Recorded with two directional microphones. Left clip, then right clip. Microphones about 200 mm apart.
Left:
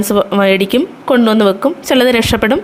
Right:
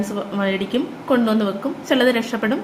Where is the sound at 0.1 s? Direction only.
50° left (ahead or behind).